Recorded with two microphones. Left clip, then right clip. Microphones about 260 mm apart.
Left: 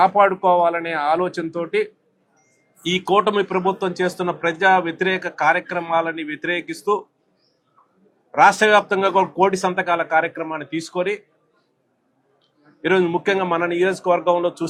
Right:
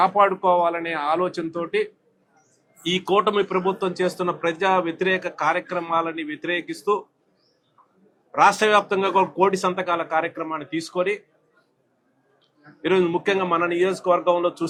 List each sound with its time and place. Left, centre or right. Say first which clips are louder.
0.0 s speech: left 3 dB; left
8.3 s speech: left 3 dB; left
12.8 s speech: left 2 dB; left